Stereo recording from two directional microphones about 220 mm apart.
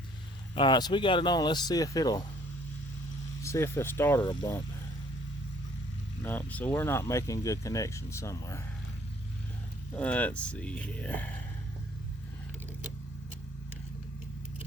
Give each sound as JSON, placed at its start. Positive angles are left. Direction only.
{"t": 0.5, "sound": "speech", "side_deg": 20}
{"t": 3.4, "sound": "speech", "side_deg": 10}
{"t": 6.2, "sound": "speech", "side_deg": 10}
{"t": 9.9, "sound": "speech", "side_deg": 5}